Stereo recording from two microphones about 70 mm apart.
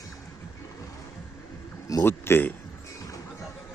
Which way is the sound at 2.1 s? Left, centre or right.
Left.